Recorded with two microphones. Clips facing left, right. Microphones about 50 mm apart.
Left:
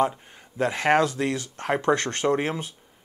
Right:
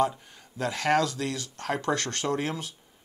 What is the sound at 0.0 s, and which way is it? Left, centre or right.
Speech, left.